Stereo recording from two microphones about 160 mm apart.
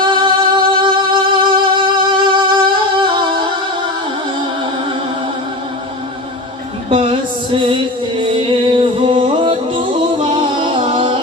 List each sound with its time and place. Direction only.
0.0 s music: 30° right (ahead or behind)
6.9 s music: 35° right (ahead or behind)
9.0 s music: 35° right (ahead or behind)